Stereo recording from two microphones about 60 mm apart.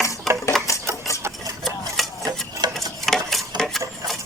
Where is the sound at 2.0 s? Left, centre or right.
Centre.